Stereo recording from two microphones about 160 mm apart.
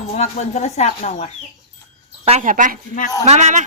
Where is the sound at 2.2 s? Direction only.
40° right (ahead or behind).